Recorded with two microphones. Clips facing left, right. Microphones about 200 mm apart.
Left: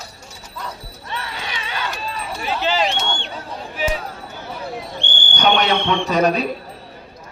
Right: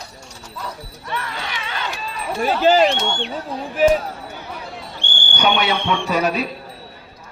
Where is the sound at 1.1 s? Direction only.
20° left (ahead or behind).